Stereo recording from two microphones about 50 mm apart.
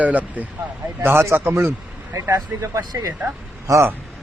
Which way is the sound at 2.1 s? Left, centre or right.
Right.